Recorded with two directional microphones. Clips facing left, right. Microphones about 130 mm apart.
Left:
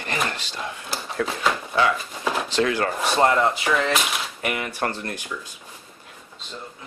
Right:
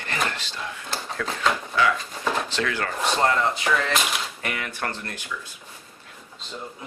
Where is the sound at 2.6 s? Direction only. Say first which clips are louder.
Left 3 dB; 25° left (ahead or behind).